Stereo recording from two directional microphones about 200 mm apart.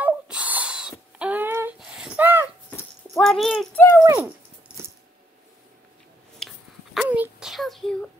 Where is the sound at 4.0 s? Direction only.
15° right (ahead or behind).